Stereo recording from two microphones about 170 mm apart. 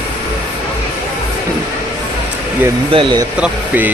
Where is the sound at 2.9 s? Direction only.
30° right (ahead or behind).